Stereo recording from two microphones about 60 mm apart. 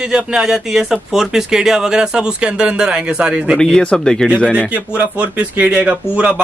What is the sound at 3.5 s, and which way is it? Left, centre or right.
Speech, centre.